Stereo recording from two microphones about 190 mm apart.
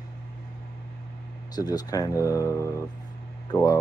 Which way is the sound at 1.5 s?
20° left (ahead or behind).